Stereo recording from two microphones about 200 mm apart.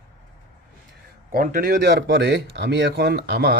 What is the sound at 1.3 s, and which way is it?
Speech, 45° right (ahead or behind).